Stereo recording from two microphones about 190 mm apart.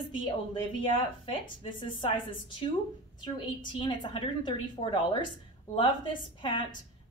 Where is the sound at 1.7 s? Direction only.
25° left (ahead or behind).